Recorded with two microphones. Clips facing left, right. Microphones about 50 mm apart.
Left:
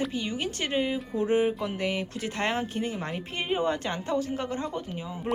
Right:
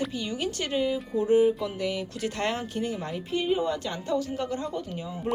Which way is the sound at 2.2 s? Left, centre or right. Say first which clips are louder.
Right 1 dB; left.